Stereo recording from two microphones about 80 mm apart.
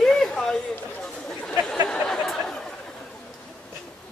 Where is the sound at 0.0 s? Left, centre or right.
Centre.